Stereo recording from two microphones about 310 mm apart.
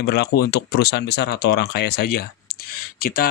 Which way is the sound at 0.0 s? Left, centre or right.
Left.